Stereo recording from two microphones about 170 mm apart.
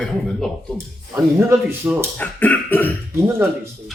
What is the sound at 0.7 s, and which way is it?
Speech, 15° right (ahead or behind).